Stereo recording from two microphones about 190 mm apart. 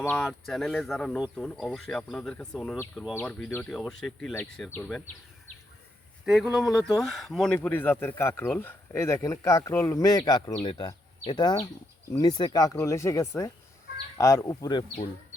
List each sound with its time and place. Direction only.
0.2 s speech: centre (ahead or behind)
6.2 s speech: 5° right (ahead or behind); by 14.8 s 20° left (ahead or behind)